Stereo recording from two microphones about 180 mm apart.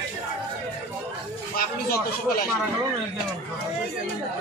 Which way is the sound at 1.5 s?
55° left (ahead or behind).